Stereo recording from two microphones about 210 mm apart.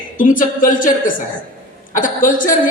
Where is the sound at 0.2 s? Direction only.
40° left (ahead or behind).